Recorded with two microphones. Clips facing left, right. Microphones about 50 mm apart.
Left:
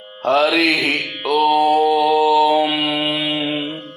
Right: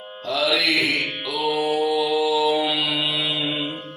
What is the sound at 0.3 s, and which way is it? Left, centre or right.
Mantra, left.